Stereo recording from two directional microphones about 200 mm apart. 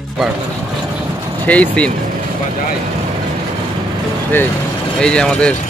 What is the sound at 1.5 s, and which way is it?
Speech, 5° left (ahead or behind).